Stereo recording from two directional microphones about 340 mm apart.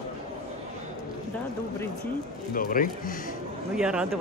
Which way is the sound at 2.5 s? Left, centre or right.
Left.